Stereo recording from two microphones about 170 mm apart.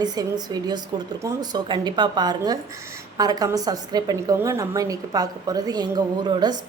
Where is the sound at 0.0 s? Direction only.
25° right (ahead or behind).